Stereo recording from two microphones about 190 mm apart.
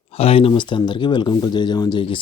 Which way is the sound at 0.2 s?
30° left (ahead or behind).